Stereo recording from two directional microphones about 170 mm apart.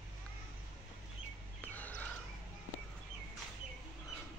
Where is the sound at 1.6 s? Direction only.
10° left (ahead or behind).